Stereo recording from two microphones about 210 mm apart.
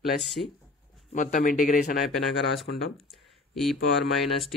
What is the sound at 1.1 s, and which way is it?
Speech, 40° left (ahead or behind).